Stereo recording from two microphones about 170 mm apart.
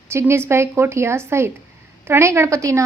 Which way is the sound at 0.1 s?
15° right (ahead or behind).